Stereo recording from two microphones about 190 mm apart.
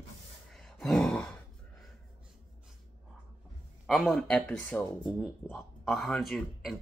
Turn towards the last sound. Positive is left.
turn(degrees=0)  # may be behind; listen again after turning